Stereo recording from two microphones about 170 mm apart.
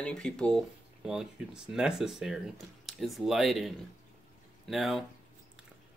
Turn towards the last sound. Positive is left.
turn(degrees=0)  # may be behind; listen again after turning